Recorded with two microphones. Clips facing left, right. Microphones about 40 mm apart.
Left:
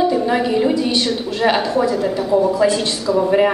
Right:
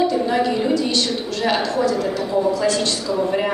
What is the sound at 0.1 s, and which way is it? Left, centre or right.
A woman's voice, centre.